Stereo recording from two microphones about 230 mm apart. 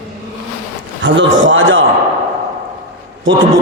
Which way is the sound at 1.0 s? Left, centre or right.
Right.